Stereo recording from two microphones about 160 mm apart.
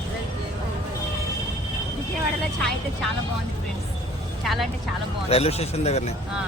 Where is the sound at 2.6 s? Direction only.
Centre (ahead or behind).